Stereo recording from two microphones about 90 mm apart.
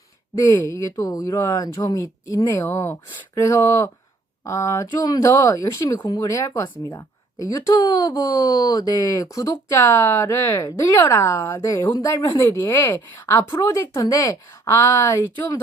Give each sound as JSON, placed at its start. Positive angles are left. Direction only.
{"t": 0.7, "sound": "speech", "side_deg": 35}
{"t": 2.0, "sound": "speech", "side_deg": 35}
{"t": 12.4, "sound": "speech", "side_deg": 25}